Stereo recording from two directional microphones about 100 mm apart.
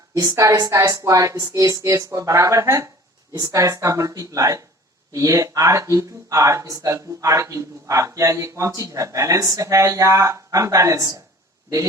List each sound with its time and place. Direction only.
0.1 s a woman's voice: 35° right (ahead or behind)